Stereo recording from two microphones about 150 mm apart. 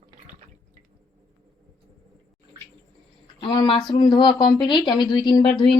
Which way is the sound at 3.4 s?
30° left (ahead or behind).